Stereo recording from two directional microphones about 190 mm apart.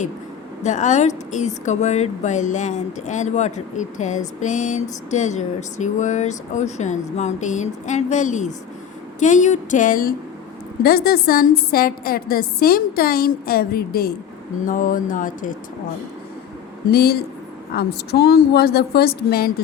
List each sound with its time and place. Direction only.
0.6 s a woman's voice: 40° left (ahead or behind)
16.9 s a woman's voice: 55° left (ahead or behind)